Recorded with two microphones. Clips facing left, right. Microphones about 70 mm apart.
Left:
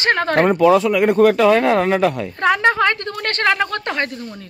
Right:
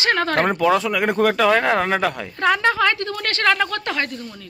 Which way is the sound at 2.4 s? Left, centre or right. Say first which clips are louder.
Left 2 dB; centre.